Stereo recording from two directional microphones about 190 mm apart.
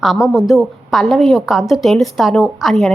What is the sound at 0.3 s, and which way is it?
Speech, centre (ahead or behind).